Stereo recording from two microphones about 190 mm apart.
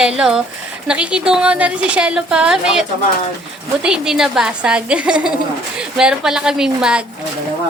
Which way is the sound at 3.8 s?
5° right (ahead or behind).